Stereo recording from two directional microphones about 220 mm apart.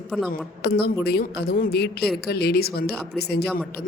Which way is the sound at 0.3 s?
45° left (ahead or behind).